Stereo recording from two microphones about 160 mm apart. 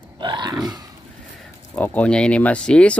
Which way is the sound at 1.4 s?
10° left (ahead or behind).